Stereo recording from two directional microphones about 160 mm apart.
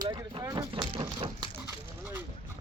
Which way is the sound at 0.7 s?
30° right (ahead or behind).